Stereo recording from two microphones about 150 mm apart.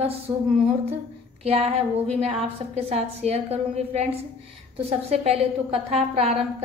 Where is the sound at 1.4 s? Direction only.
45° right (ahead or behind).